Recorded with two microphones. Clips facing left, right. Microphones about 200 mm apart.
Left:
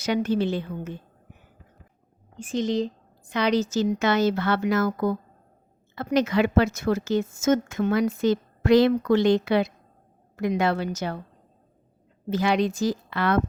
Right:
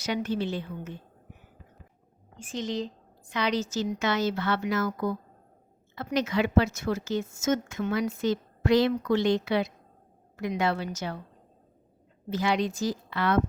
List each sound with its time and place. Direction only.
0.0 s a woman's voice: 65° left (ahead or behind)
2.6 s speech: 45° left (ahead or behind)
3.3 s a woman's voice: 60° left (ahead or behind)
10.3 s speech: 55° left (ahead or behind)
12.3 s a woman's voice: 70° left (ahead or behind)